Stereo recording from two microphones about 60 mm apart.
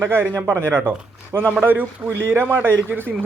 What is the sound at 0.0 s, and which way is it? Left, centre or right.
Speech, right.